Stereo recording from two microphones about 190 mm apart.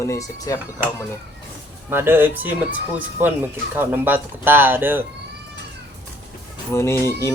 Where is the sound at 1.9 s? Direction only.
10° right (ahead or behind).